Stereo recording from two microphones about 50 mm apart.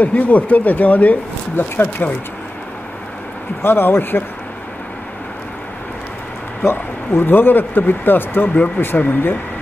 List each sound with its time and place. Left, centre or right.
0.0 s speech: left
1.6 s speech: left
3.6 s speech: left
6.6 s speech: left